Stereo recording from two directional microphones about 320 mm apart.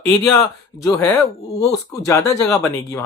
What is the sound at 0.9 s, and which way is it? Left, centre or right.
Speech, centre.